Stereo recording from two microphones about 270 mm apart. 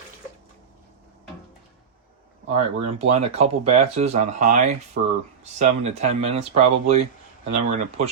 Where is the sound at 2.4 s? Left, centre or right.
Right.